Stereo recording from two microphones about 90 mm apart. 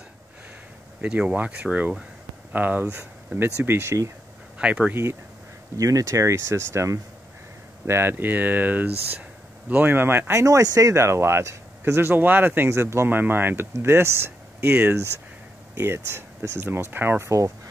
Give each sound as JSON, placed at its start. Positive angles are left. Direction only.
{"t": 1.0, "sound": "speech", "side_deg": -15}
{"t": 4.6, "sound": "speech", "side_deg": -15}
{"t": 5.8, "sound": "speech", "side_deg": -40}
{"t": 10.4, "sound": "speech", "side_deg": -40}